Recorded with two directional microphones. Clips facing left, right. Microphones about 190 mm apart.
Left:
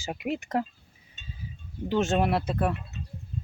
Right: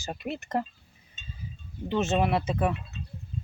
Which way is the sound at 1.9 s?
Centre (ahead or behind).